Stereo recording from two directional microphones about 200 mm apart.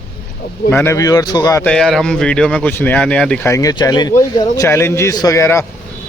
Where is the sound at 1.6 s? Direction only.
5° left (ahead or behind).